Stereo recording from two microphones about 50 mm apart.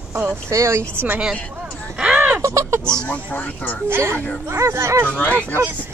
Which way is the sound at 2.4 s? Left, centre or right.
Right.